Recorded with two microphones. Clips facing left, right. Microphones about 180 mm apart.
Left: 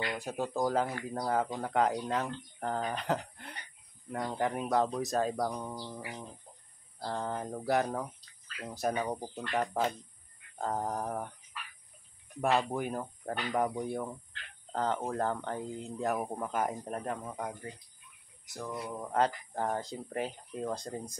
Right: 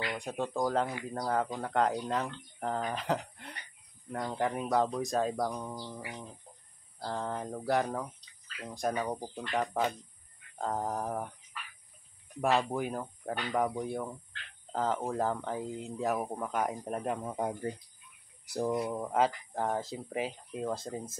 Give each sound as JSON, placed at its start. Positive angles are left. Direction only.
{"t": 0.1, "sound": "speech", "side_deg": 5}
{"t": 9.2, "sound": "speech", "side_deg": -10}
{"t": 10.6, "sound": "speech", "side_deg": 0}
{"t": 12.4, "sound": "speech", "side_deg": 0}
{"t": 16.8, "sound": "speech", "side_deg": -10}
{"t": 18.7, "sound": "speech", "side_deg": -20}
{"t": 18.9, "sound": "speech", "side_deg": -5}